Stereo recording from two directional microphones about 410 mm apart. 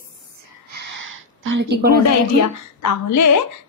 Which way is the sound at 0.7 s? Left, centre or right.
Right.